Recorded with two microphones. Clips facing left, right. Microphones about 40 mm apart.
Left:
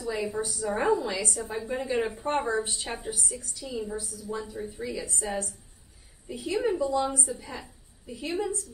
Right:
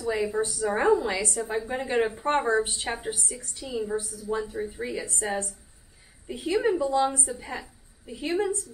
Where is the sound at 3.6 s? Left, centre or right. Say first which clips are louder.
Right 3 dB; right.